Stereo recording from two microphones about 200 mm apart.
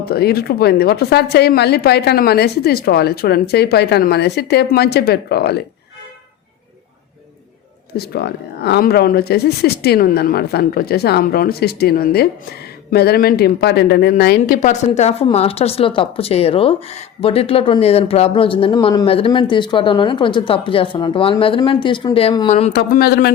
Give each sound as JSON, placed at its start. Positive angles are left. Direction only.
{"t": 0.0, "sound": "a woman's voice", "side_deg": 50}
{"t": 7.9, "sound": "a woman's voice", "side_deg": 50}
{"t": 22.7, "sound": "a woman's voice", "side_deg": 50}